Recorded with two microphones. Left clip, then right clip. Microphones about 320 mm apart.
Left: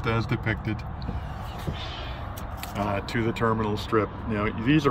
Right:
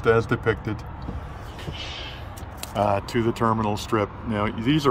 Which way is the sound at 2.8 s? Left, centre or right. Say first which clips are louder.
Right 6 dB; centre.